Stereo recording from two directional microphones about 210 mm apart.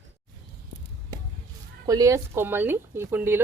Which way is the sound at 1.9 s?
15° right (ahead or behind).